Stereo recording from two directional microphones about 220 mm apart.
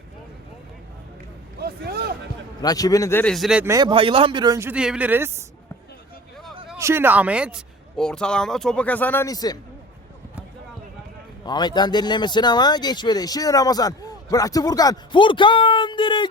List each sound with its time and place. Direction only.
1.6 s a sound: 45° right (ahead or behind)
2.6 s speech: 15° left (ahead or behind); by 3.7 s centre (ahead or behind)
3.7 s speech: 20° right (ahead or behind)
6.7 s speech: 10° right (ahead or behind); by 9.6 s 15° left (ahead or behind)
11.4 s speech: 20° left (ahead or behind)